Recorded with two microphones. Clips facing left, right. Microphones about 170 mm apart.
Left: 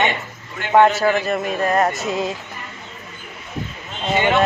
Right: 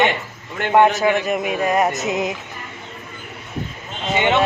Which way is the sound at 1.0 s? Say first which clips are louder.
Even; 15° right (ahead or behind).